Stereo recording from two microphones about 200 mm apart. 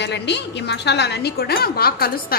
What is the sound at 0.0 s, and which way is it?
A woman's voice, 60° left (ahead or behind).